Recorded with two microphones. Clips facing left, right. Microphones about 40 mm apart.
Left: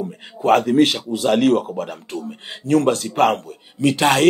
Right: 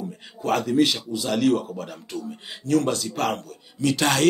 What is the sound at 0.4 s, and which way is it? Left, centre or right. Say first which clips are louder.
Speech: left 6 dB; left.